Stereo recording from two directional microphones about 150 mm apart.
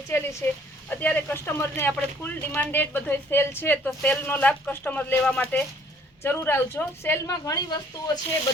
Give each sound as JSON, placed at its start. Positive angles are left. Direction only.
{"t": 0.1, "sound": "a woman's voice", "side_deg": 20}